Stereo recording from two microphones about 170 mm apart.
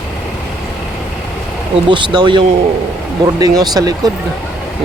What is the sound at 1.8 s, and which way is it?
Speech, 30° right (ahead or behind).